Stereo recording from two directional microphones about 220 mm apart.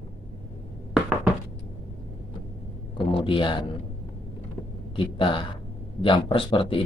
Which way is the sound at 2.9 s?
25° left (ahead or behind).